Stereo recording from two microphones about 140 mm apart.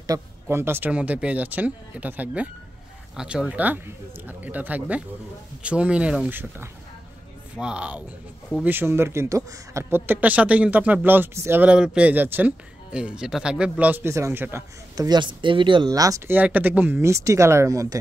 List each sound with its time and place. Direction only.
0.0 s a man's voice: 20° right (ahead or behind)
15.0 s speech: 35° right (ahead or behind)
16.3 s speech: 10° right (ahead or behind)